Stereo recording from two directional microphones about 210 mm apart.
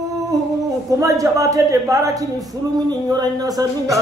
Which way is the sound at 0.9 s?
15° right (ahead or behind).